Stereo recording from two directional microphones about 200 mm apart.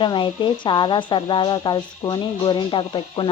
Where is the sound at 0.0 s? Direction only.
25° left (ahead or behind).